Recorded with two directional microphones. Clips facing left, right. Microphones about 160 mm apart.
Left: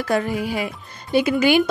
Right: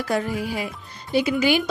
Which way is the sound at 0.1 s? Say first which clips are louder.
Left 3 dB; 70° left (ahead or behind).